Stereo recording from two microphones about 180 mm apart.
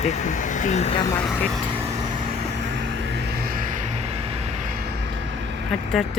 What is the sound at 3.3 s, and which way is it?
Vehicle, 60° right (ahead or behind).